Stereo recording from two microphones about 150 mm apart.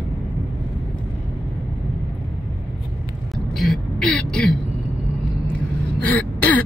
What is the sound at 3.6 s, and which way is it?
Throat clearing, centre (ahead or behind).